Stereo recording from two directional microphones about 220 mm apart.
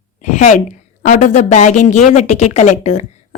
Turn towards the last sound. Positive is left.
turn(degrees=30)  # may be behind; listen again after turning